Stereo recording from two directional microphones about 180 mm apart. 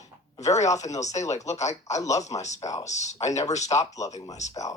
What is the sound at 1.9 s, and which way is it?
Speech, 20° left (ahead or behind).